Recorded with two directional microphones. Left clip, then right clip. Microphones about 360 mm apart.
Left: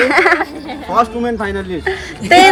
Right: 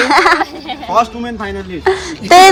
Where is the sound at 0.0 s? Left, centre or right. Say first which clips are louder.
Right 1 dB; centre.